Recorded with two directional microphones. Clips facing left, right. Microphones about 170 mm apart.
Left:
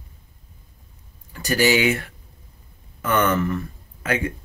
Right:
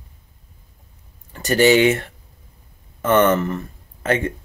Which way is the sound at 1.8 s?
40° right (ahead or behind).